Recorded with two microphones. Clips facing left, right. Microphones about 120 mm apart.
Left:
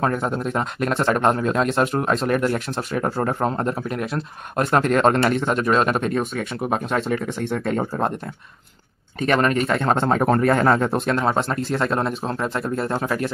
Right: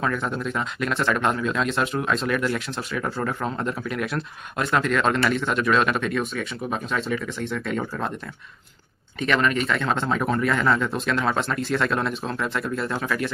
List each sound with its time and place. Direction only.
0.0 s speech: 45° left (ahead or behind)
6.6 s speech: 55° left (ahead or behind)
9.2 s speech: 45° left (ahead or behind)